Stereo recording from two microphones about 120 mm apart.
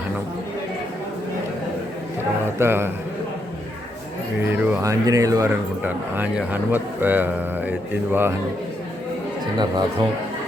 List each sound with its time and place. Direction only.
2.6 s speech: 20° right (ahead or behind)
4.4 s a man's voice: 15° right (ahead or behind)
4.8 s speech: 30° right (ahead or behind)
5.8 s a man's voice: 15° right (ahead or behind)
9.6 s speech: 35° right (ahead or behind)